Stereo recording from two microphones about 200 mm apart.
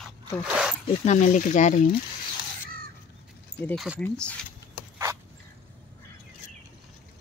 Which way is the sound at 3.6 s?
Centre (ahead or behind).